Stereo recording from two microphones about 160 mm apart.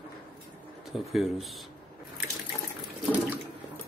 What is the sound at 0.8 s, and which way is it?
Speech, centre (ahead or behind).